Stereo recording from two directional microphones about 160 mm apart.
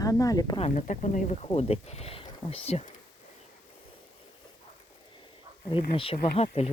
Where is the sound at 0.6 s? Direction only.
50° left (ahead or behind).